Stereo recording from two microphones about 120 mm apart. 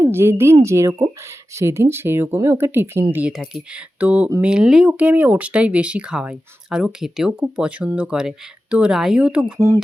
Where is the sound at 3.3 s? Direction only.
5° right (ahead or behind).